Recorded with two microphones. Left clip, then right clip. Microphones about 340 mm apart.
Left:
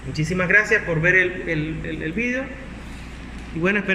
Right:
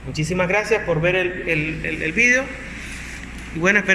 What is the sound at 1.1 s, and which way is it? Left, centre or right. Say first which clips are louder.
A man's voice: left 1 dB; centre.